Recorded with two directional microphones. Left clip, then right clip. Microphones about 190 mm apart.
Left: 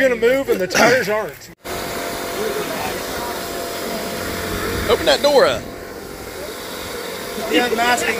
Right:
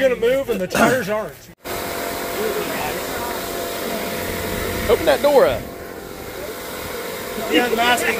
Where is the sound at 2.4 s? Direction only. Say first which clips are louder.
Even; 30° right (ahead or behind).